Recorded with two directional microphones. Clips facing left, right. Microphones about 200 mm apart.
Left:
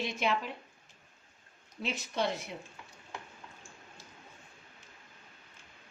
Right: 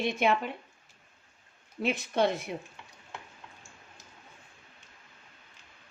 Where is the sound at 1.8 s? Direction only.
55° right (ahead or behind).